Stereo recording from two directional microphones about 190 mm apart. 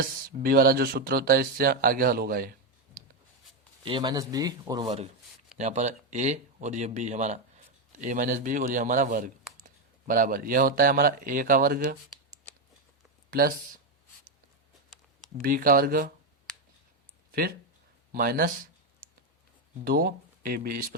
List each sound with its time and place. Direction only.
0.0 s speech: 50° right (ahead or behind)
3.8 s speech: 25° right (ahead or behind)
5.5 s speech: 35° right (ahead or behind)
13.3 s speech: 50° right (ahead or behind)
15.4 s speech: 50° right (ahead or behind)
18.1 s speech: 50° right (ahead or behind)
19.8 s speech: 50° right (ahead or behind)